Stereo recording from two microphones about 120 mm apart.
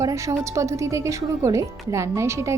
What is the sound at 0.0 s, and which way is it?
A woman's voice, 25° right (ahead or behind).